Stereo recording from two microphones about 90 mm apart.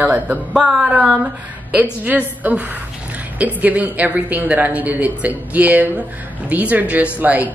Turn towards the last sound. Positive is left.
turn(degrees=-20)  # may be behind; listen again after turning